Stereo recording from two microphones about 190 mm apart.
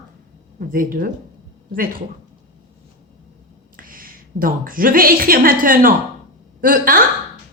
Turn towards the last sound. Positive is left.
turn(degrees=-45)  # may be behind; listen again after turning